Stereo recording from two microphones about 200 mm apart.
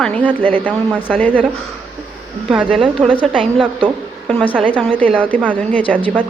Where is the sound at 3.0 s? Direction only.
5° right (ahead or behind).